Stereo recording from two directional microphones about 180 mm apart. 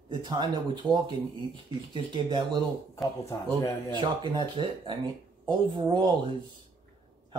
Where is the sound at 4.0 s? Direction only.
25° right (ahead or behind).